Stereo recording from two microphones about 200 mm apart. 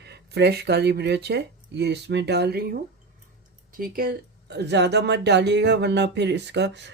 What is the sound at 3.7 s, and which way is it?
Speech, 45° right (ahead or behind).